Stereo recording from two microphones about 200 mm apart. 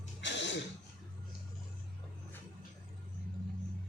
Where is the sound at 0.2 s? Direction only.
65° left (ahead or behind).